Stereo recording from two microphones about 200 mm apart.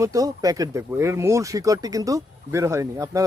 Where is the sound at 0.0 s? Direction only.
15° right (ahead or behind).